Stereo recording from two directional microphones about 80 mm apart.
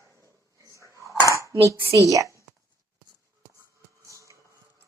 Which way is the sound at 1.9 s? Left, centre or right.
Right.